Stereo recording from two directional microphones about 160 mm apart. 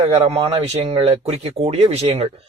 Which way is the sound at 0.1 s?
40° right (ahead or behind).